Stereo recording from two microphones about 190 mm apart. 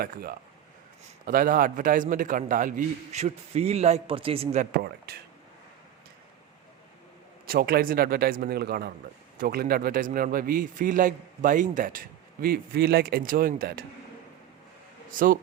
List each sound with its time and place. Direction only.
0.0 s a man's voice: 50° right (ahead or behind); by 4.6 s 30° right (ahead or behind)
4.6 s a man's voice: 55° right (ahead or behind)
7.4 s a man's voice: 50° right (ahead or behind)
15.1 s speech: 45° right (ahead or behind)